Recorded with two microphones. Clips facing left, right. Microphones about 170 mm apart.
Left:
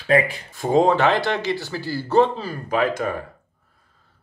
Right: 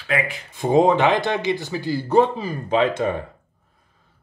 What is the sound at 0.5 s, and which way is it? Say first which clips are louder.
Speech: right 1 dB; 20° right (ahead or behind).